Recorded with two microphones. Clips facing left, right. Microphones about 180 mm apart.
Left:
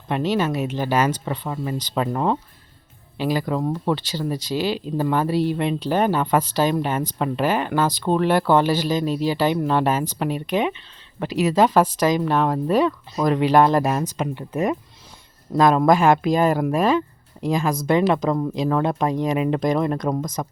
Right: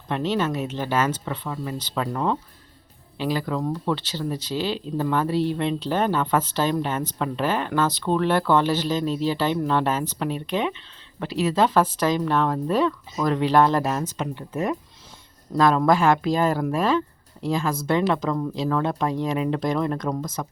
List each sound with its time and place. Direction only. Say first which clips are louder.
0.1 s speech: left 2 dB; 10° left (ahead or behind)
3.2 s speech: left 3 dB; 10° left (ahead or behind)